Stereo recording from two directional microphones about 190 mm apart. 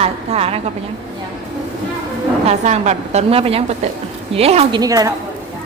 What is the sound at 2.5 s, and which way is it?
A woman's voice, 35° right (ahead or behind).